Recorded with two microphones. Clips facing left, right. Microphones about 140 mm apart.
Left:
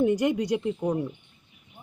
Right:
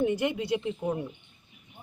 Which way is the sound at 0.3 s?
45° left (ahead or behind).